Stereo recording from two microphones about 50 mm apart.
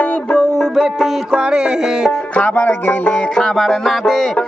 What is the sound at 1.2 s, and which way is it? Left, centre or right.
Music, centre.